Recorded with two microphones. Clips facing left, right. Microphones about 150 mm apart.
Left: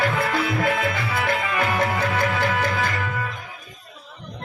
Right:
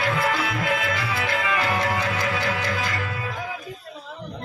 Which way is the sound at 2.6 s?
50° left (ahead or behind).